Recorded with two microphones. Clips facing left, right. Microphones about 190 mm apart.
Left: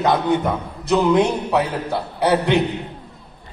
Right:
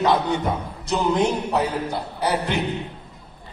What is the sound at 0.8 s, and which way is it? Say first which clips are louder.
A man's voice: left 5 dB; 60° left (ahead or behind).